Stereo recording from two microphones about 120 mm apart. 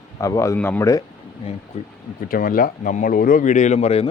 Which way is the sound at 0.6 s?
15° left (ahead or behind).